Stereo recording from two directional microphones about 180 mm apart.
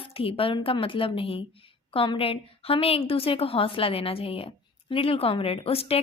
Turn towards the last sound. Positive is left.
turn(degrees=35)  # may be behind; listen again after turning